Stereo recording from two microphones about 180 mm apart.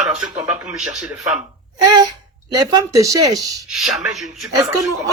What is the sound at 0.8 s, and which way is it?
Speech, centre (ahead or behind).